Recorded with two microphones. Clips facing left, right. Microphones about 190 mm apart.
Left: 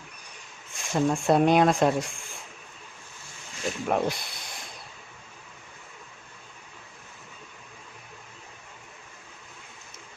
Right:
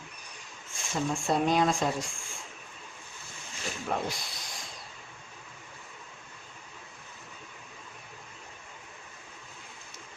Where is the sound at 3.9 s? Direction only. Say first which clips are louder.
Left 6 dB; 55° left (ahead or behind).